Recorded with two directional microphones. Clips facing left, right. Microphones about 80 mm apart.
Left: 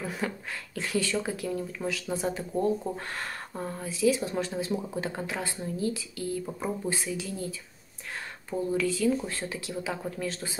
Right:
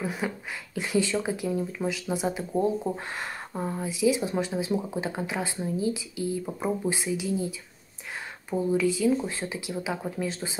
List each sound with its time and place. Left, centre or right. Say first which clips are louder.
0.0 s speech: right 2 dB; centre